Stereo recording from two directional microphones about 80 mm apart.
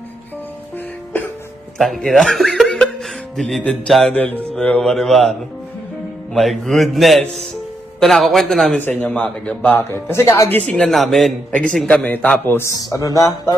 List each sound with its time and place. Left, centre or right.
1.8 s speech: centre
4.1 s speech: centre
6.3 s speech: centre
8.7 s speech: centre
10.5 s speech: centre
10.9 s speech: centre; by 12.5 s left
12.5 s a man's voice: left